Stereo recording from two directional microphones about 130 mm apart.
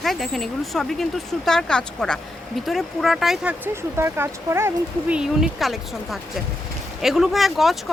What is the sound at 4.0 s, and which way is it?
Speech, 20° right (ahead or behind).